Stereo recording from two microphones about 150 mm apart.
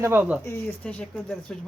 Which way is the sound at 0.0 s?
15° right (ahead or behind).